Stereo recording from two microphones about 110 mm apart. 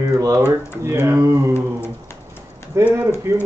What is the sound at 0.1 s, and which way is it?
Speech, 25° right (ahead or behind).